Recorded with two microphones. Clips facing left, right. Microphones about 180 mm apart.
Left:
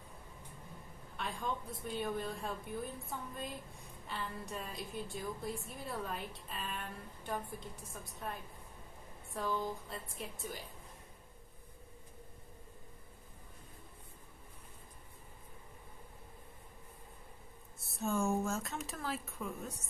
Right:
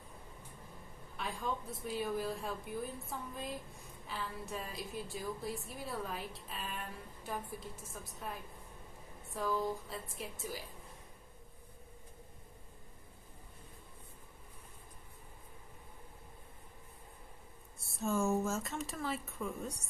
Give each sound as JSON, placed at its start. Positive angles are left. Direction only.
{"t": 1.1, "sound": "a woman's voice", "side_deg": 0}
{"t": 17.8, "sound": "a woman's voice", "side_deg": 0}